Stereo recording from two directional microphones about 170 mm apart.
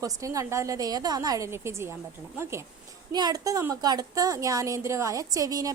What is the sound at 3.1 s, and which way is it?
A woman's voice, 25° right (ahead or behind).